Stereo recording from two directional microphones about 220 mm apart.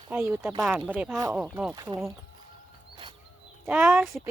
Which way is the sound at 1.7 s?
20° right (ahead or behind).